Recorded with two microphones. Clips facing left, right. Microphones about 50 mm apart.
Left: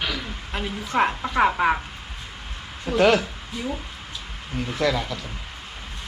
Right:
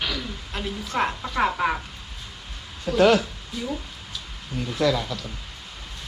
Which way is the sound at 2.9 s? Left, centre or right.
Left.